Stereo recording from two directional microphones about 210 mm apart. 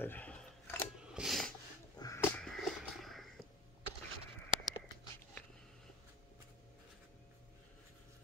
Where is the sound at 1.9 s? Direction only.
15° left (ahead or behind).